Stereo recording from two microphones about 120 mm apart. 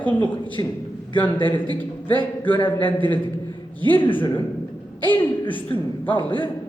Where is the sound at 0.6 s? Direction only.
35° left (ahead or behind).